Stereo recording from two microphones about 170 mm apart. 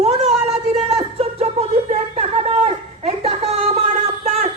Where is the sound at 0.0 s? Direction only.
40° right (ahead or behind).